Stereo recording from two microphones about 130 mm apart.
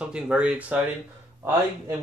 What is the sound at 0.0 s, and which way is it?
Speech, 10° right (ahead or behind).